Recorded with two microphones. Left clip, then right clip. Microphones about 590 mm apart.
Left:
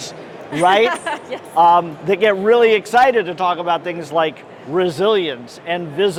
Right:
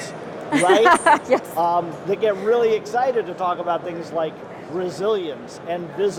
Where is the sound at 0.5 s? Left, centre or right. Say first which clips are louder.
Even; right.